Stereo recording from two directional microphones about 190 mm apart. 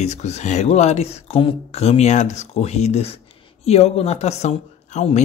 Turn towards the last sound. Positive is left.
turn(degrees=35)  # may be behind; listen again after turning